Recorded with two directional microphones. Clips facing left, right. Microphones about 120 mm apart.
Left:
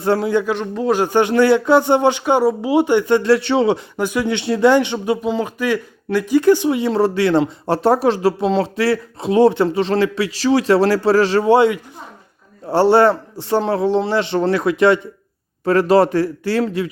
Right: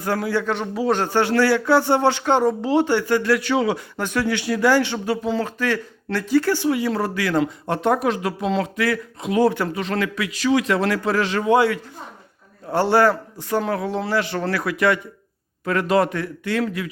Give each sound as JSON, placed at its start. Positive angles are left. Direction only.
{"t": 0.0, "sound": "speech", "side_deg": 25}
{"t": 0.4, "sound": "a man's voice", "side_deg": 0}
{"t": 0.9, "sound": "speech", "side_deg": 15}
{"t": 3.9, "sound": "speech", "side_deg": 15}
{"t": 4.3, "sound": "a man's voice", "side_deg": 25}